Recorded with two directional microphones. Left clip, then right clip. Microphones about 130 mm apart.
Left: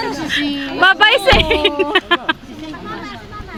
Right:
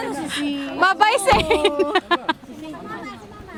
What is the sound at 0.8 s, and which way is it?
Speech, 20° right (ahead or behind).